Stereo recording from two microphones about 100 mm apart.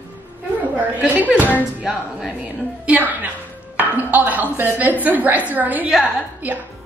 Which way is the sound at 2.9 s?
15° right (ahead or behind).